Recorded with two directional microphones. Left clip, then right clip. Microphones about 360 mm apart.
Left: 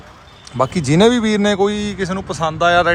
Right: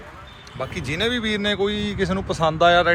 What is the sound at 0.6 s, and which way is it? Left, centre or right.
A man's voice, centre.